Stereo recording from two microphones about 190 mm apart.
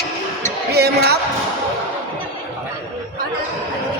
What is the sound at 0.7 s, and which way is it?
Music, 60° right (ahead or behind).